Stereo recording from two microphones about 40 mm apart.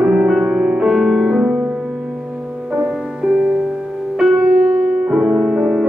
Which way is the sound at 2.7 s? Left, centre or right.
Centre.